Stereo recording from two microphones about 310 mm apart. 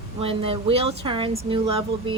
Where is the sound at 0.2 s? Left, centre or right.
Centre.